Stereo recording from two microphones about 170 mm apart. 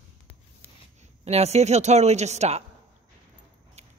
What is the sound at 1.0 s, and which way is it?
A man's voice, 40° right (ahead or behind).